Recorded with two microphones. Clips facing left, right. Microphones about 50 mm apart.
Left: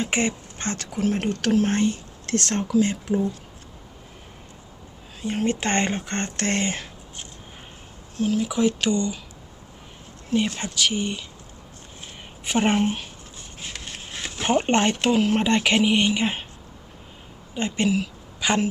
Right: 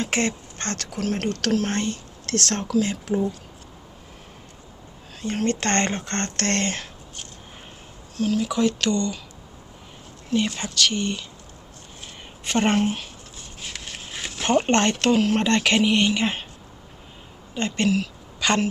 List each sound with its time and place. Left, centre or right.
0.0 s speech: centre
5.2 s speech: centre
8.1 s speech: left
8.4 s speech: centre
10.6 s speech: centre
12.5 s speech: centre
13.8 s a sound: centre
14.3 s speech: centre
17.5 s a woman's voice: centre